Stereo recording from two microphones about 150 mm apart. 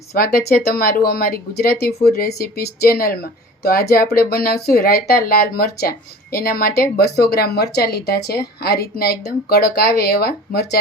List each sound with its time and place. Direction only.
0.1 s speech: 90° left